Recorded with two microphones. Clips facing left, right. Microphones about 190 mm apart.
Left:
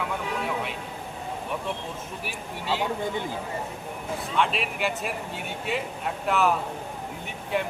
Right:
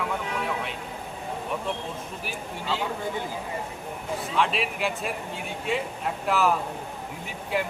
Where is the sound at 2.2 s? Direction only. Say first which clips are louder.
Right 1 dB; centre (ahead or behind).